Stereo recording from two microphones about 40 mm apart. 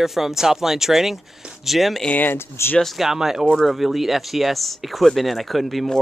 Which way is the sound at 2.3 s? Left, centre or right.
Left.